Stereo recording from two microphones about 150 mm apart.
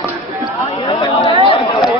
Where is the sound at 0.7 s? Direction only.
30° left (ahead or behind).